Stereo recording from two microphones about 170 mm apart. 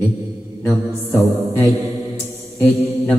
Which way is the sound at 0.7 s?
15° right (ahead or behind).